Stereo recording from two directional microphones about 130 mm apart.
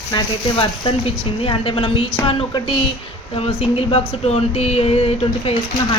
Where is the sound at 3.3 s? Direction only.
50° left (ahead or behind).